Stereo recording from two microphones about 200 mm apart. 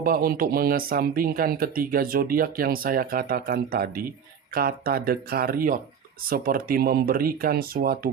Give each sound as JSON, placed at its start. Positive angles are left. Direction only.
{"t": 0.0, "sound": "speech", "side_deg": -45}